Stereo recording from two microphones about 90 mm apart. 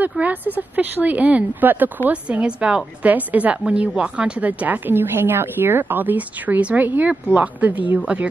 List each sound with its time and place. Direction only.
0.2 s a woman's voice: 20° right (ahead or behind)